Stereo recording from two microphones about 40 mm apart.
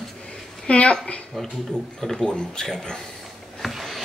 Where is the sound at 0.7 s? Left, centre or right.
Left.